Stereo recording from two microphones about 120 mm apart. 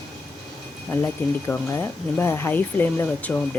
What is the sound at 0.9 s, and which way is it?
Speech, 15° left (ahead or behind).